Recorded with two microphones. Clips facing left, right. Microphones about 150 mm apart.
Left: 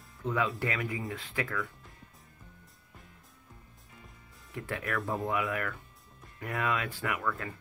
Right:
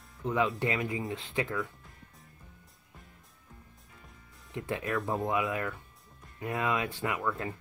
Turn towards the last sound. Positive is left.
turn(degrees=-20)  # may be behind; listen again after turning